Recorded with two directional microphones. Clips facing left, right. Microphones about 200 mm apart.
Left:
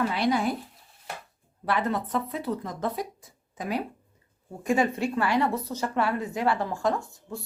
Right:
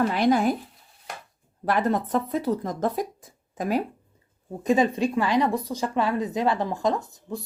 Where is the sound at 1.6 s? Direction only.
45° right (ahead or behind).